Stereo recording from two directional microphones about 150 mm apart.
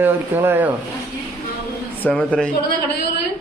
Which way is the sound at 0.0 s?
15° right (ahead or behind).